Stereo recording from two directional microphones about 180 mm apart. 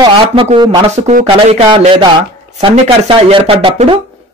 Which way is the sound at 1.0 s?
40° right (ahead or behind).